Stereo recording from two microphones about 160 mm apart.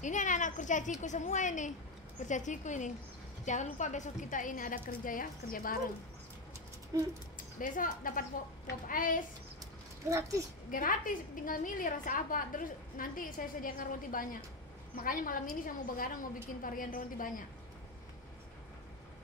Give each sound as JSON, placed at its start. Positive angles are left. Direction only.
{"t": 0.0, "sound": "a child's voice", "side_deg": 50}
{"t": 6.9, "sound": "speech", "side_deg": -25}
{"t": 7.5, "sound": "a woman's voice", "side_deg": 55}
{"t": 10.0, "sound": "speech", "side_deg": -20}
{"t": 10.7, "sound": "a woman's voice", "side_deg": 60}